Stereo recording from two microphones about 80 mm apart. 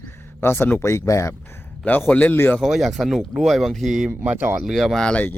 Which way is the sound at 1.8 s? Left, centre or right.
Left.